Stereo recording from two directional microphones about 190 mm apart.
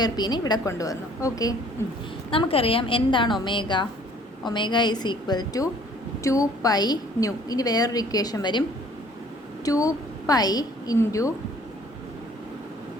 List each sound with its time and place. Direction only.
0.0 s a woman's voice: 20° left (ahead or behind)
2.3 s a woman's voice: 30° left (ahead or behind)
9.6 s a woman's voice: 20° left (ahead or behind)